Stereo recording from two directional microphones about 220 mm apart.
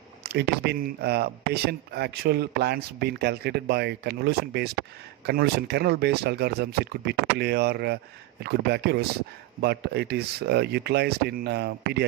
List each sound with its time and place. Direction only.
0.2 s speech: 50° right (ahead or behind)